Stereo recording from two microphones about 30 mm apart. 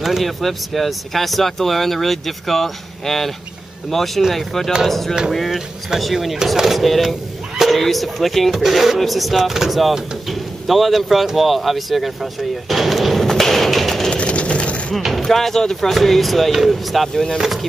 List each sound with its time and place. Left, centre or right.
0.2 s speech: centre
6.8 s speech: centre
13.2 s a sound: centre
14.1 s vehicle: left
15.0 s speech: centre
15.2 s speech: centre